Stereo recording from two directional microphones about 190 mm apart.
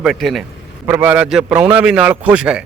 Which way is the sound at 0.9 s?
10° right (ahead or behind).